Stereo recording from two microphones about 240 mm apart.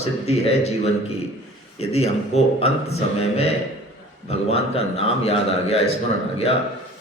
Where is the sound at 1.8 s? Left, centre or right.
Left.